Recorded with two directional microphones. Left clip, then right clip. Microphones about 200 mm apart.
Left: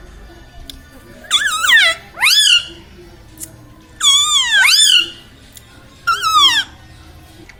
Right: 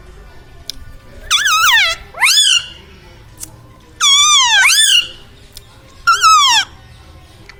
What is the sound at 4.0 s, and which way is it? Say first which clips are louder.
Cat: right 3 dB; 40° right (ahead or behind).